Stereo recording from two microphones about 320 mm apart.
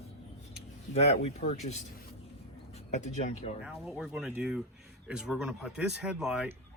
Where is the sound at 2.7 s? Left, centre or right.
Left.